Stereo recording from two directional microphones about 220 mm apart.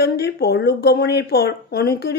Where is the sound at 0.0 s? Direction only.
45° left (ahead or behind).